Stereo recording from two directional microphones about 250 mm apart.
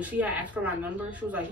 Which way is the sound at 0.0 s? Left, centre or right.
Centre.